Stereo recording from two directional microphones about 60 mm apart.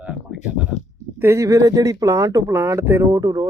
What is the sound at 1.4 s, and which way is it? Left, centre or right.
Speech, right.